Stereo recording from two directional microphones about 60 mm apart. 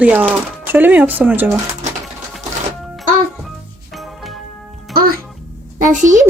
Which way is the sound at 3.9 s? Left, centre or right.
Centre.